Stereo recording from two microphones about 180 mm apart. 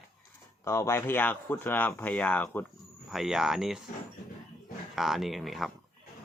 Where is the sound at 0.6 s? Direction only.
15° left (ahead or behind).